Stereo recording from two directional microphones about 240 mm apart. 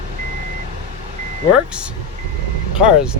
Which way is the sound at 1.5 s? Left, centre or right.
Centre.